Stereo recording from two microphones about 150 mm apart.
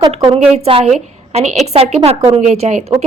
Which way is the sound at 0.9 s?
50° right (ahead or behind).